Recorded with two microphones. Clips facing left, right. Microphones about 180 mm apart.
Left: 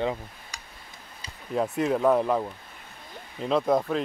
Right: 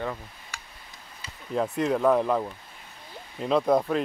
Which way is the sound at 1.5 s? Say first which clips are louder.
Even; centre (ahead or behind).